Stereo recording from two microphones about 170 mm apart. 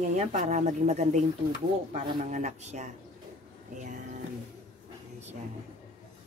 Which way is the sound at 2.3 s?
45° right (ahead or behind).